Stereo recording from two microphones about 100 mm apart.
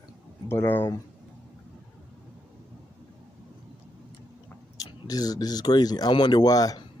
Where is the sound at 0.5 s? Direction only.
25° left (ahead or behind).